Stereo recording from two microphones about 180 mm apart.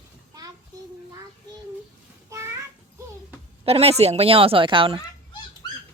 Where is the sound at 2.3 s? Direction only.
15° right (ahead or behind).